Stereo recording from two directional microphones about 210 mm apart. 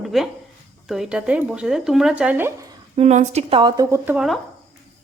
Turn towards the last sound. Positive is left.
turn(degrees=-10)  # may be behind; listen again after turning